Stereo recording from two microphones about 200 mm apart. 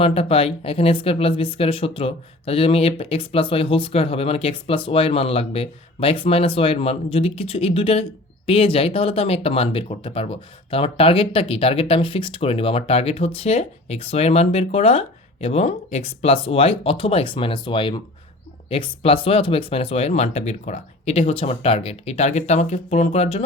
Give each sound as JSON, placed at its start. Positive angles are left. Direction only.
{"t": 0.0, "sound": "speech", "side_deg": 30}